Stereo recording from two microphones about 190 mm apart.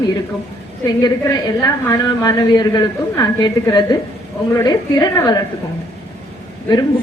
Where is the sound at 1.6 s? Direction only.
20° left (ahead or behind).